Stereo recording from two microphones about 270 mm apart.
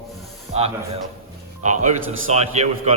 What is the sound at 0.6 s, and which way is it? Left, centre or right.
A man's voice, right.